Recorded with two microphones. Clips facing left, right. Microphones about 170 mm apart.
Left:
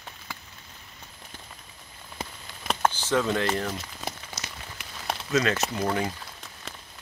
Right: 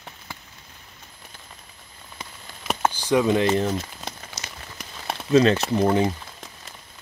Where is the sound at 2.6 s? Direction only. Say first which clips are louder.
Right 2 dB; 10° right (ahead or behind).